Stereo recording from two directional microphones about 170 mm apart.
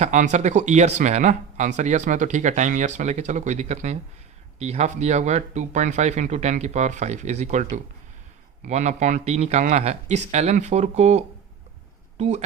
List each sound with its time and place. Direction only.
0.0 s a man's voice: 45° right (ahead or behind)